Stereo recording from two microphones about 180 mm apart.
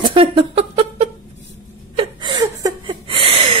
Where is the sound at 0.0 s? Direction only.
30° right (ahead or behind).